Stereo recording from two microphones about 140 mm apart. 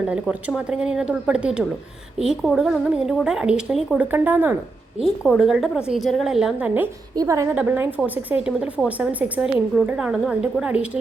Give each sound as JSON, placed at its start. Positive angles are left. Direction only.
{"t": 0.1, "sound": "a woman's voice", "side_deg": -5}
{"t": 7.2, "sound": "a woman's voice", "side_deg": -25}
{"t": 7.5, "sound": "a woman's voice", "side_deg": -10}